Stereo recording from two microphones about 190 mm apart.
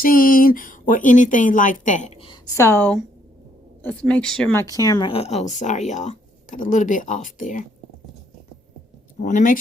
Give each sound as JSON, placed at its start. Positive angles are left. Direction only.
{"t": 0.0, "sound": "speech", "side_deg": 45}
{"t": 2.6, "sound": "a woman's voice", "side_deg": 10}
{"t": 4.7, "sound": "speech", "side_deg": 20}
{"t": 9.2, "sound": "speech", "side_deg": 45}